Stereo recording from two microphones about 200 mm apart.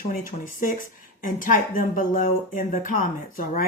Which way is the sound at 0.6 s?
40° left (ahead or behind).